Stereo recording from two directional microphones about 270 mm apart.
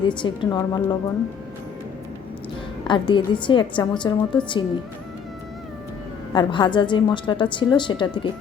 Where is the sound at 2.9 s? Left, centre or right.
Centre.